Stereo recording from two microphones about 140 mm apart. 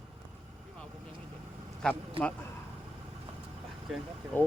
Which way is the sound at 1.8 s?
5° left (ahead or behind).